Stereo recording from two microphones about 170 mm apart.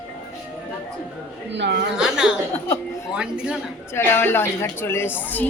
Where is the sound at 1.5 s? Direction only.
90° right.